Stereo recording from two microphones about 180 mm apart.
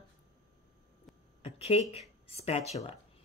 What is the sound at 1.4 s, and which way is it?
Speech, 35° left (ahead or behind).